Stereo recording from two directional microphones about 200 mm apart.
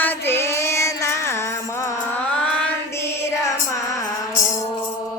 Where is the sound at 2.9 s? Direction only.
15° left (ahead or behind).